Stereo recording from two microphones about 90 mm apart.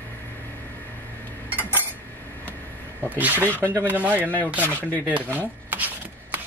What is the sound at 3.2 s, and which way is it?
Speech, 20° right (ahead or behind).